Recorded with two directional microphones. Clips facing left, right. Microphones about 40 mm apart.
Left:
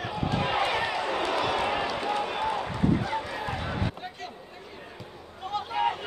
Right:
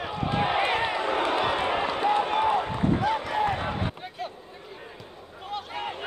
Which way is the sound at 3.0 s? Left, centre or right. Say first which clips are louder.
Right 6 dB; right.